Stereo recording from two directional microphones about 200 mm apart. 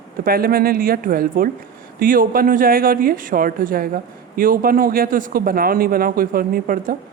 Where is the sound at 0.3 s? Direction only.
50° right (ahead or behind).